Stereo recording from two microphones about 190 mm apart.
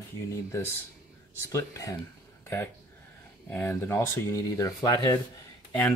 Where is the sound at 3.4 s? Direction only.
10° left (ahead or behind).